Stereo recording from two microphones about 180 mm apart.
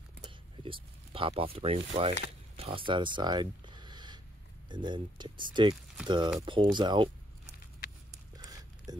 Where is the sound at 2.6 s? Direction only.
30° right (ahead or behind).